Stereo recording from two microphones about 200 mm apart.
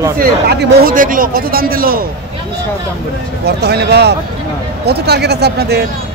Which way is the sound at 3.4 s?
55° right (ahead or behind).